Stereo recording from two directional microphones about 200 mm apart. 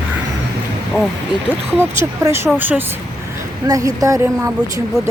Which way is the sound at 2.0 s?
15° right (ahead or behind).